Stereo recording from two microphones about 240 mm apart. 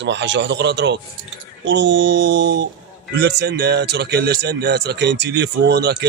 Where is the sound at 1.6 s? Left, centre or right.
Right.